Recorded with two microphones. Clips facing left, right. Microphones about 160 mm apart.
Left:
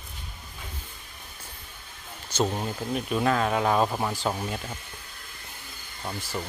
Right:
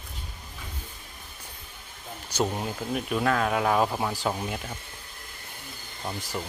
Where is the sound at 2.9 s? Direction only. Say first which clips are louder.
Left 1 dB; centre (ahead or behind).